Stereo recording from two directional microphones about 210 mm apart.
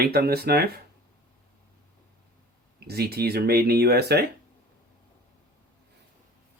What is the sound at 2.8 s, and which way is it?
Speech, 50° right (ahead or behind).